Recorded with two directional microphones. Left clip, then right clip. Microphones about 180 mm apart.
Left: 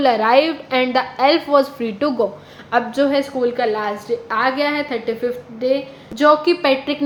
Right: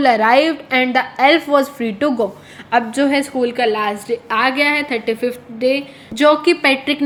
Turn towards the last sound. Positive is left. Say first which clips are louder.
# right 2 dB
turn(degrees=-35)  # may be behind; listen again after turning